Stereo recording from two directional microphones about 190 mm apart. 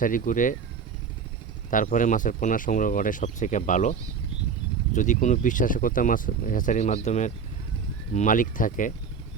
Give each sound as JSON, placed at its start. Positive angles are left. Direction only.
{"t": 0.0, "sound": "speech", "side_deg": 45}
{"t": 1.7, "sound": "speech", "side_deg": 45}
{"t": 4.9, "sound": "speech", "side_deg": 40}